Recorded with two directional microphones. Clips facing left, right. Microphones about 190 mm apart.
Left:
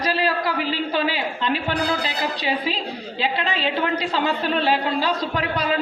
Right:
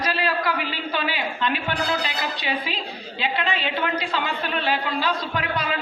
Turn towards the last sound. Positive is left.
turn(degrees=35)  # may be behind; listen again after turning